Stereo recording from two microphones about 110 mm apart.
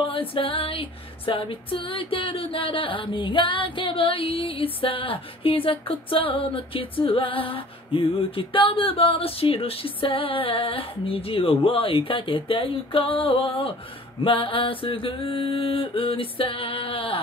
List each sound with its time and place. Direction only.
0.0 s music: 55° left (ahead or behind)